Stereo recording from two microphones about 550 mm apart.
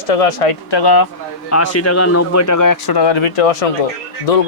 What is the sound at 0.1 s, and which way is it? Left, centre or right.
Speech, left.